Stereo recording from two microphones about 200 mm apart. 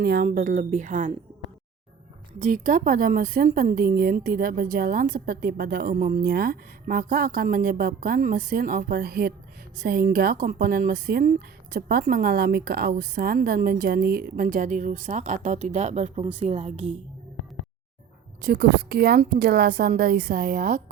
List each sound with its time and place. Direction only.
0.0 s a woman's voice: 50° right (ahead or behind)
2.4 s speech: 40° right (ahead or behind)
18.4 s speech: 55° right (ahead or behind)